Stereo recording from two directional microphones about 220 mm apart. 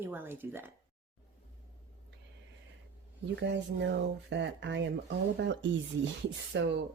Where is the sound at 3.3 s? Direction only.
50° right (ahead or behind).